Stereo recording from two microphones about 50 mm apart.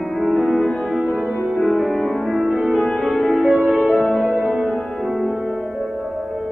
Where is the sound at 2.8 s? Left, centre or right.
Centre.